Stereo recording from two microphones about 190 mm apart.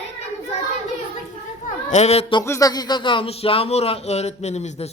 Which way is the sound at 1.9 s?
35° left (ahead or behind).